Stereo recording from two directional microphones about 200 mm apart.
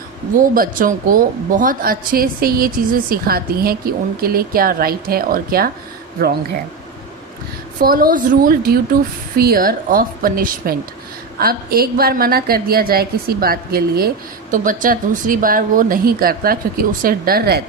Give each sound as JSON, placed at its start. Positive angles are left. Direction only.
{"t": 0.3, "sound": "a woman's voice", "side_deg": -45}
{"t": 7.8, "sound": "a woman's voice", "side_deg": -45}